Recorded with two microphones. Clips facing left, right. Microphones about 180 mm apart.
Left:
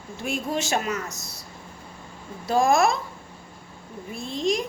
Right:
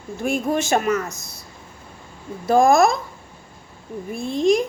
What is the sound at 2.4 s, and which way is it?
Speech, 50° right (ahead or behind).